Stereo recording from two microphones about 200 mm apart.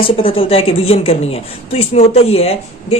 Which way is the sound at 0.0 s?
25° left (ahead or behind).